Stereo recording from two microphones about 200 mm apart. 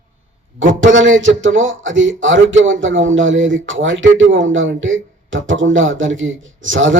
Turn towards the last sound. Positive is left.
turn(degrees=-70)  # may be behind; listen again after turning